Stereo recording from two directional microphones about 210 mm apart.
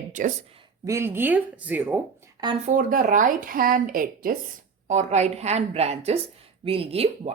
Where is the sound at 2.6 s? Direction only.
40° right (ahead or behind).